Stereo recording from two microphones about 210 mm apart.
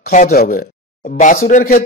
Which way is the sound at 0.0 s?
40° left (ahead or behind).